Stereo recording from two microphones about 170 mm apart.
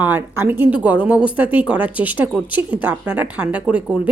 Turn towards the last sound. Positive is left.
turn(degrees=-5)  # may be behind; listen again after turning